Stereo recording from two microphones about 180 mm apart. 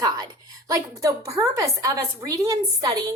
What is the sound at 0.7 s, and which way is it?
A woman's voice, 20° right (ahead or behind).